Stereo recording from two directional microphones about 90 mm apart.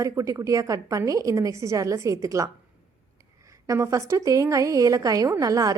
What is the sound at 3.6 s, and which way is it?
Speech, 35° right (ahead or behind).